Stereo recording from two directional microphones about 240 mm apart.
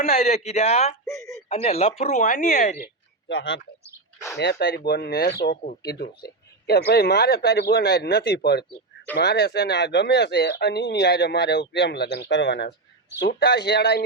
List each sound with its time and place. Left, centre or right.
0.0 s speech: left
1.0 s a sound: centre
1.5 s speech: left
3.2 s speech: left
4.9 s speech: left